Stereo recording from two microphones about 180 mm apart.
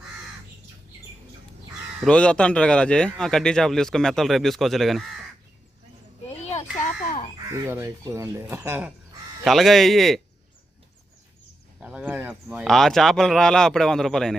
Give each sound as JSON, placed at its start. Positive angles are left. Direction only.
{"t": 2.0, "sound": "a man's voice", "side_deg": 5}
{"t": 6.3, "sound": "a sound", "side_deg": 40}
{"t": 7.5, "sound": "speech", "side_deg": -20}
{"t": 9.4, "sound": "a man's voice", "side_deg": 0}
{"t": 11.8, "sound": "speech", "side_deg": -5}
{"t": 12.6, "sound": "a man's voice", "side_deg": 0}